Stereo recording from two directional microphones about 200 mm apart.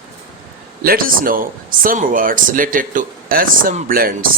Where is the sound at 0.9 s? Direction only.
45° right (ahead or behind).